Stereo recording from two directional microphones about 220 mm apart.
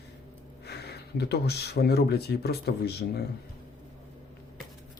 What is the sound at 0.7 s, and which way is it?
Speech, 50° left (ahead or behind).